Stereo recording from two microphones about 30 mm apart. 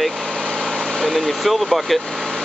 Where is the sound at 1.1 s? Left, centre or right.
Centre.